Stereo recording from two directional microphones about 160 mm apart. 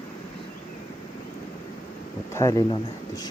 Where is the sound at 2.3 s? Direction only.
20° left (ahead or behind).